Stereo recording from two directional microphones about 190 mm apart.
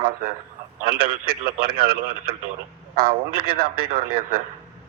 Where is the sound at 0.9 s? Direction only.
50° right (ahead or behind).